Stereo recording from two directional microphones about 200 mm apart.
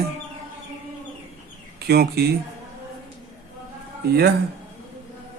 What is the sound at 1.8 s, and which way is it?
Speech, 55° right (ahead or behind).